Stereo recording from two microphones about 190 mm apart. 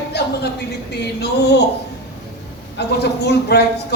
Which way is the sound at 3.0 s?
60° left (ahead or behind).